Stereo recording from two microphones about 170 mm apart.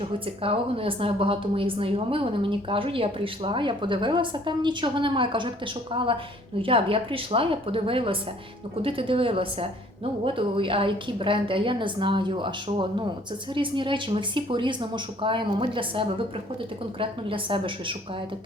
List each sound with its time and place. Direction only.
0.0 s a woman's voice: 35° right (ahead or behind)